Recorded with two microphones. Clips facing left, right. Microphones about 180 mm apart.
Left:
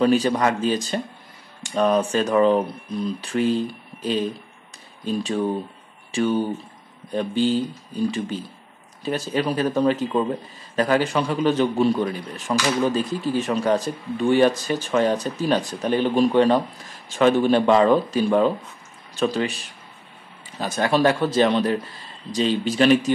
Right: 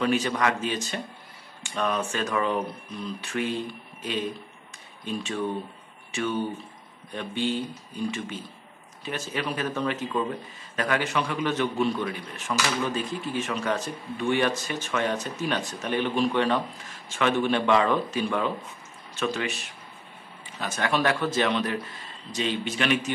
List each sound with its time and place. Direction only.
0.0 s speech: 35° left (ahead or behind)
5.0 s speech: 35° left (ahead or behind)